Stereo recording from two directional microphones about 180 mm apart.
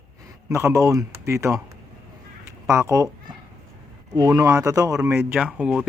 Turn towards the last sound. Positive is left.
turn(degrees=-5)  # may be behind; listen again after turning